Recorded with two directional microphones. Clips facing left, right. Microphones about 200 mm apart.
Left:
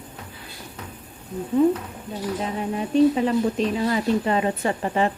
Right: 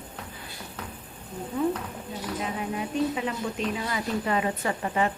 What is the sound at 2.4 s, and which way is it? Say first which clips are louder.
A woman's voice: left 2 dB; 35° left (ahead or behind).